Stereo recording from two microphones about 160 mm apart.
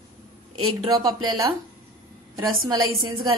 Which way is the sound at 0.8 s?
25° right (ahead or behind).